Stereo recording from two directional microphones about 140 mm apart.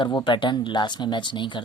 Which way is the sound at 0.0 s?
35° left (ahead or behind).